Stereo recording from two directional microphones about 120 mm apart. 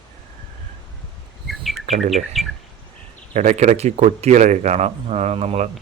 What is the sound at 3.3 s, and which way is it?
Speech, 80° right.